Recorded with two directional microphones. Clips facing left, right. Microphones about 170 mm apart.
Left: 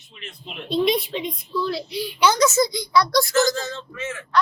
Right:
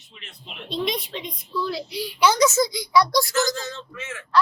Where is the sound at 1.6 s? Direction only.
10° right (ahead or behind).